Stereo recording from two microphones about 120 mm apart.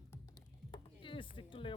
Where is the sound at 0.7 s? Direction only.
45° left (ahead or behind).